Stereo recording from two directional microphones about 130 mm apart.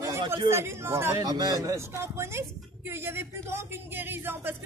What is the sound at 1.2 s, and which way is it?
Speech, 30° right (ahead or behind).